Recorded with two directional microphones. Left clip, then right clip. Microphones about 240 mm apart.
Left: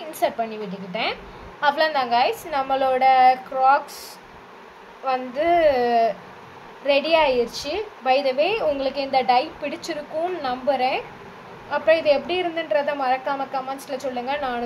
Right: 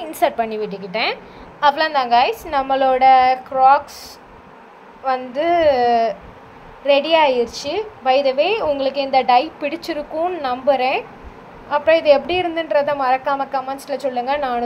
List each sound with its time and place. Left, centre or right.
0.1 s a woman's voice: right
5.0 s a woman's voice: centre